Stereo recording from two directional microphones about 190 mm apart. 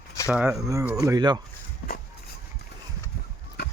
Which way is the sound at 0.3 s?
5° right (ahead or behind).